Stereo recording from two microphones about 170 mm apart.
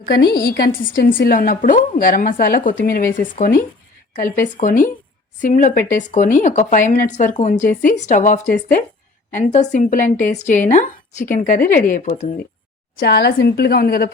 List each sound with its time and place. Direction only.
0.0 s a woman's voice: 65° left (ahead or behind); by 12.3 s 45° left (ahead or behind)
13.0 s a woman's voice: 65° left (ahead or behind)